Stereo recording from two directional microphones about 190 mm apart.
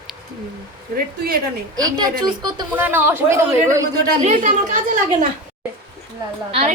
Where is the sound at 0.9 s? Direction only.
55° right (ahead or behind).